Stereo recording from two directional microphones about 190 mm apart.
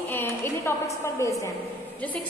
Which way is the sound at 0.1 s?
10° left (ahead or behind).